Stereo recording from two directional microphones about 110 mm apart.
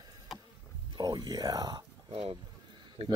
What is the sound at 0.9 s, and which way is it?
Speech, 35° right (ahead or behind).